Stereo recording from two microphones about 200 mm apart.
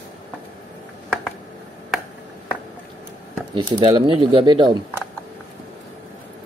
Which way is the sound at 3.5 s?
25° right (ahead or behind).